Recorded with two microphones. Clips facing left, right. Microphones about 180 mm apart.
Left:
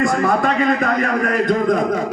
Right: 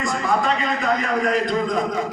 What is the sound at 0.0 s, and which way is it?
A man's voice, 55° left (ahead or behind).